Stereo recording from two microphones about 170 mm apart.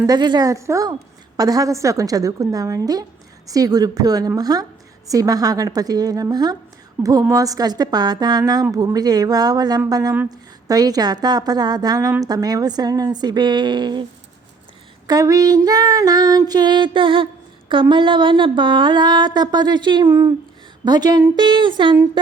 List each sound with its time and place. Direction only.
0.0 s a woman's voice: 25° right (ahead or behind)
15.0 s a woman's voice: 20° right (ahead or behind)